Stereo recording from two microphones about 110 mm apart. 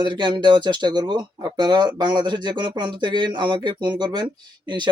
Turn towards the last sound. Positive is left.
turn(degrees=-45)  # may be behind; listen again after turning